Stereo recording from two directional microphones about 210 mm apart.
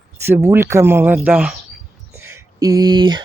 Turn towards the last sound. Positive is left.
turn(degrees=-20)  # may be behind; listen again after turning